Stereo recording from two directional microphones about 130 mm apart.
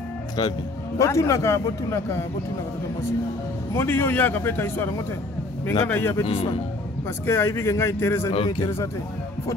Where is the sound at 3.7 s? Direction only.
15° left (ahead or behind).